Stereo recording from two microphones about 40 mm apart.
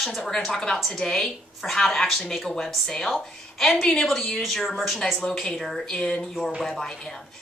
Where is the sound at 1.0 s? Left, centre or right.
Centre.